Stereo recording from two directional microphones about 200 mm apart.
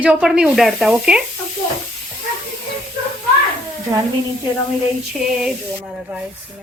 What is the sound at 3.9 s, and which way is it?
Speech, 15° right (ahead or behind).